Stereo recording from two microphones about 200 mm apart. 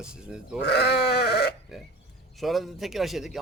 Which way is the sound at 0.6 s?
55° left (ahead or behind).